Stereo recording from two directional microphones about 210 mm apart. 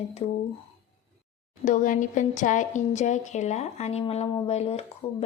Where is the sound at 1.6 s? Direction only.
40° left (ahead or behind).